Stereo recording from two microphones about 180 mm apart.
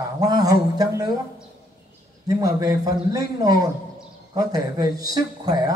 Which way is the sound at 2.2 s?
20° right (ahead or behind).